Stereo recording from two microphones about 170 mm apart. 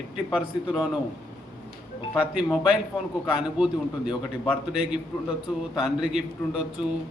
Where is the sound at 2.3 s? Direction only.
5° right (ahead or behind).